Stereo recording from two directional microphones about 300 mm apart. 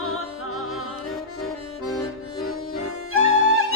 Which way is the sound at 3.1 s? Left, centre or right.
Left.